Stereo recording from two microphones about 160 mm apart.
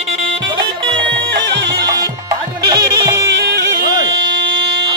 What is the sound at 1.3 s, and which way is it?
Music, 90° right.